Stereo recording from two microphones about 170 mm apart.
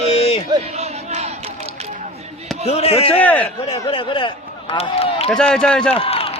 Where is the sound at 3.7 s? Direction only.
30° left (ahead or behind).